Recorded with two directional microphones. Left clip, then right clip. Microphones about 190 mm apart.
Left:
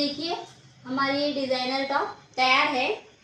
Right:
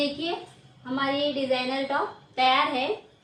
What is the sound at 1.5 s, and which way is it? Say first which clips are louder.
Speech: even; 5° right (ahead or behind).